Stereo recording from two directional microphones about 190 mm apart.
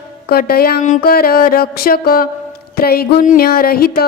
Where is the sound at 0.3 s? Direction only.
55° left (ahead or behind).